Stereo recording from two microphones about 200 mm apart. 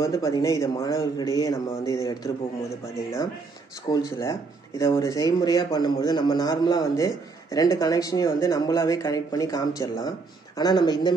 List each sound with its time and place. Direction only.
0.0 s speech: 15° left (ahead or behind)
3.9 s speech: 15° left (ahead or behind)